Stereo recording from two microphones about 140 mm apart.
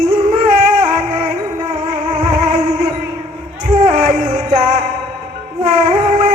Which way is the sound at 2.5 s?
60° right (ahead or behind).